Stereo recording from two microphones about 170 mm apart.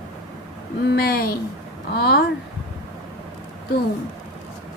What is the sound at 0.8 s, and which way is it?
Speech, 65° left (ahead or behind).